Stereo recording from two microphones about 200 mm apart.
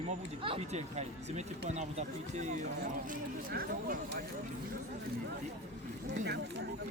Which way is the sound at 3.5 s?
45° right (ahead or behind).